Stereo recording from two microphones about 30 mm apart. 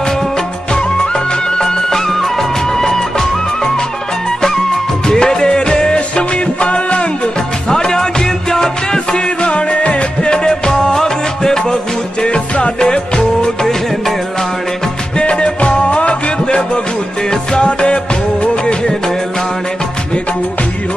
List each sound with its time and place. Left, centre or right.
1.6 s music: centre
4.4 s music: centre
5.9 s music: left
7.7 s music: left
9.4 s music: left
10.7 s music: centre
12.3 s music: left
12.8 s music of bollywood: left
15.1 s music: left